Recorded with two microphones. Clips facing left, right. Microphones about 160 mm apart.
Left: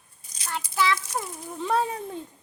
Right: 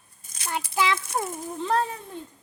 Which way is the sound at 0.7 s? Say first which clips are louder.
Even; 20° right (ahead or behind).